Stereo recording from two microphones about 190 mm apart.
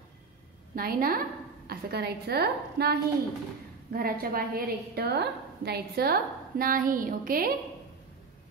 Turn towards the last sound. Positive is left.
turn(degrees=-50)  # may be behind; listen again after turning